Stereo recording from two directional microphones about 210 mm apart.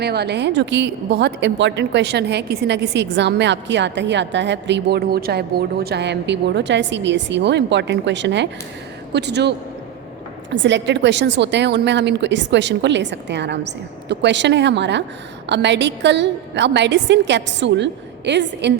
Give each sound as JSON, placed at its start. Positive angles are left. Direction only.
{"t": 0.0, "sound": "a woman's voice", "side_deg": -50}